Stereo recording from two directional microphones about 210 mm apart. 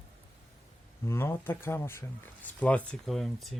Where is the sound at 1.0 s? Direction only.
10° left (ahead or behind).